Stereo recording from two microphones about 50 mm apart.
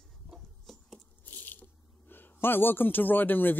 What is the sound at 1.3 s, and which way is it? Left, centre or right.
Speech, left.